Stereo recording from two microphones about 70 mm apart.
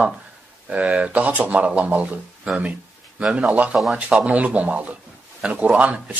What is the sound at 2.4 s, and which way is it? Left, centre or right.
Speech, centre.